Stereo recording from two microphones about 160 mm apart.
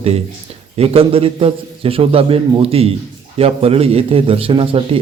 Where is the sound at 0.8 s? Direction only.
40° right (ahead or behind).